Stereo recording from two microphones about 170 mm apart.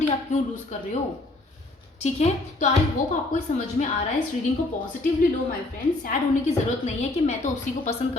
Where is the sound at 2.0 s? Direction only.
40° left (ahead or behind).